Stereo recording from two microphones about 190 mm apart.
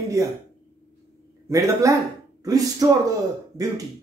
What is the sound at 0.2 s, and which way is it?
Speech, 15° right (ahead or behind).